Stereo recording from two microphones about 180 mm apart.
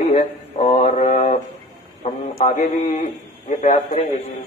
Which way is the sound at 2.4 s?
40° left (ahead or behind).